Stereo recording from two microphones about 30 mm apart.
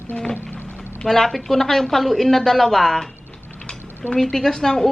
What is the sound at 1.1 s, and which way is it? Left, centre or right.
A woman's voice, centre.